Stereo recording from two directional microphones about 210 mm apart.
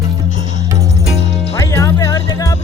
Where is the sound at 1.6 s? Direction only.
15° left (ahead or behind).